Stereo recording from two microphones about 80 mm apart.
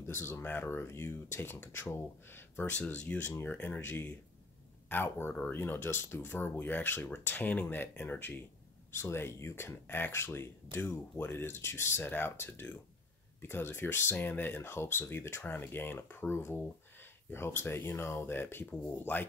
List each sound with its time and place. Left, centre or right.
0.0 s speech: left